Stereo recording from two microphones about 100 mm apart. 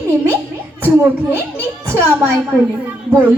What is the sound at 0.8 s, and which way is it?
A woman's voice, 20° right (ahead or behind).